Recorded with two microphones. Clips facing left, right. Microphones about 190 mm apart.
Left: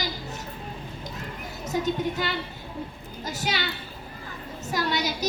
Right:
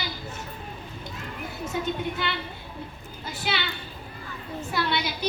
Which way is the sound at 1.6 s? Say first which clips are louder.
Left 3 dB; 40° left (ahead or behind).